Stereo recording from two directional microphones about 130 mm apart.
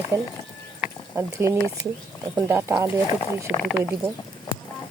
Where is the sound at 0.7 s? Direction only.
15° right (ahead or behind).